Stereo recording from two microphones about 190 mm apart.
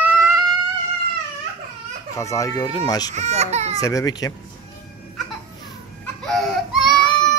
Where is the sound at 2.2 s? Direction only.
15° left (ahead or behind).